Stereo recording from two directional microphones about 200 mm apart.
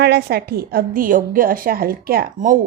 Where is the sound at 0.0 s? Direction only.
55° right (ahead or behind).